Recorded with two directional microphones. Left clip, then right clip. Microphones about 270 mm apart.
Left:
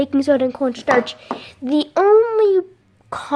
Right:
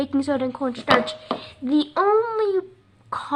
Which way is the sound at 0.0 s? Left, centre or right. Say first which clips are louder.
Left 7 dB; left.